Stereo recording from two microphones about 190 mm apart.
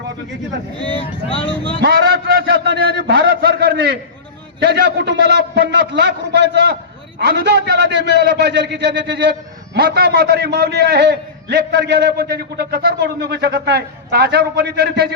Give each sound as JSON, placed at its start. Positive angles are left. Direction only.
{"t": 0.9, "sound": "speech", "side_deg": 30}
{"t": 1.8, "sound": "a man's voice", "side_deg": -55}